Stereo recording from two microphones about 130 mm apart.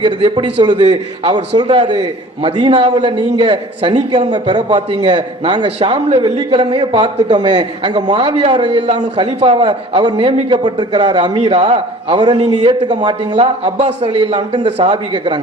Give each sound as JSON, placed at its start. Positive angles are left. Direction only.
{"t": 0.0, "sound": "a man's voice", "side_deg": -40}
{"t": 13.8, "sound": "a man's voice", "side_deg": -45}